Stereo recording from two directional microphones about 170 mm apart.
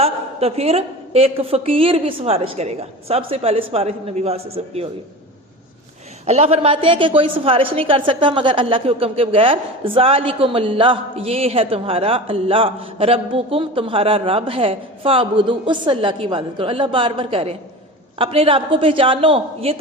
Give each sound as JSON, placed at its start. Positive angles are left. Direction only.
{"t": 0.0, "sound": "a woman's voice", "side_deg": -35}
{"t": 6.2, "sound": "a woman's voice", "side_deg": -40}